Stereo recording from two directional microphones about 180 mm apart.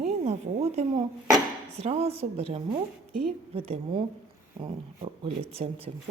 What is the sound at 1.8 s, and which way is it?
Speech, 35° right (ahead or behind).